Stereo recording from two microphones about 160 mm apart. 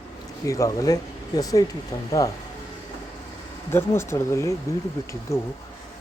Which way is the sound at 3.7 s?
15° left (ahead or behind).